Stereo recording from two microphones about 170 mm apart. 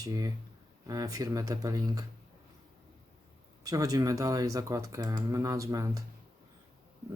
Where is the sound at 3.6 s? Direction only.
20° right (ahead or behind).